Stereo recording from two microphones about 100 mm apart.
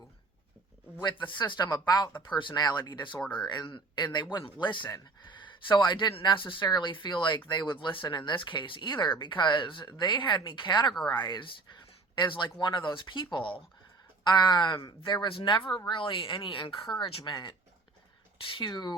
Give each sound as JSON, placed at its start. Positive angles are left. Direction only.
{"t": 1.0, "sound": "speech", "side_deg": 55}
{"t": 3.2, "sound": "speech", "side_deg": 10}
{"t": 3.4, "sound": "speech", "side_deg": 45}
{"t": 17.2, "sound": "speech", "side_deg": 50}